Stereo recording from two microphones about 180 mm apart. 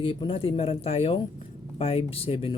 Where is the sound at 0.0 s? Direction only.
30° left (ahead or behind).